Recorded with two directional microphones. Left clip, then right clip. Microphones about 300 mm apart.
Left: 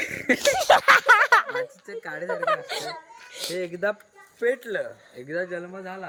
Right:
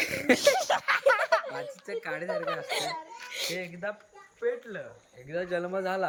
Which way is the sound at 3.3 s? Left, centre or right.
Centre.